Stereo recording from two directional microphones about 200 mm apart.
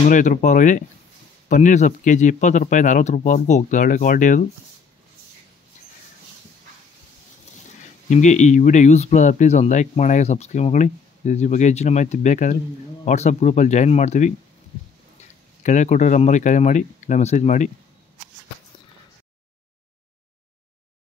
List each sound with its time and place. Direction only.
0.1 s speech: 40° left (ahead or behind)
8.1 s speech: 35° left (ahead or behind)
15.6 s speech: 35° left (ahead or behind)